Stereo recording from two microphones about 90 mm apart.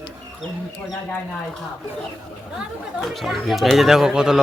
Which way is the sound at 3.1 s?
Centre (ahead or behind).